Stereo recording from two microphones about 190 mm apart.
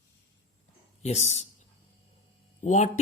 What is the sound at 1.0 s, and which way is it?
Speech, 35° left (ahead or behind).